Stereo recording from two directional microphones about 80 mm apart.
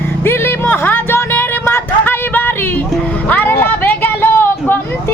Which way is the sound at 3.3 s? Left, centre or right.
Left.